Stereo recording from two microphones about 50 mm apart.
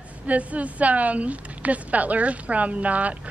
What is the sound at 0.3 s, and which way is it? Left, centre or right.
A woman's voice, right.